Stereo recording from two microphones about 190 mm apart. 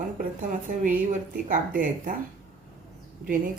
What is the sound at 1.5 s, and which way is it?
Speech, 45° right (ahead or behind).